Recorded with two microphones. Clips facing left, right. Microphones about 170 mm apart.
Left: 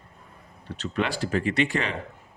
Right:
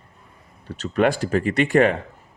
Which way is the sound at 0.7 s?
45° right (ahead or behind).